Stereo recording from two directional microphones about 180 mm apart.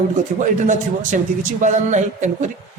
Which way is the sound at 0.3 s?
45° right (ahead or behind).